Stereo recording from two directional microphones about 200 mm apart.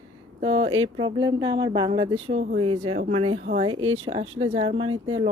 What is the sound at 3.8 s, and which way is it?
Speech, 85° right.